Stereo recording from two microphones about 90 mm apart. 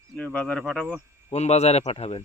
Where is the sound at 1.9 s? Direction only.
90° left.